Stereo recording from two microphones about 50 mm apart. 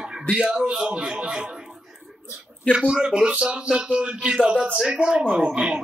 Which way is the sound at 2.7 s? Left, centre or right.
Centre.